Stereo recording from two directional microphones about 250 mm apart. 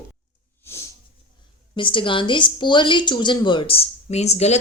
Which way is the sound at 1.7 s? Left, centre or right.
Centre.